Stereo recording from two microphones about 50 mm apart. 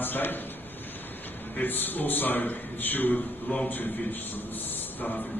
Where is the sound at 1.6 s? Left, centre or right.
Left.